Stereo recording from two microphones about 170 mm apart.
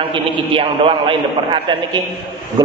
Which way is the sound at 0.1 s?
30° right (ahead or behind).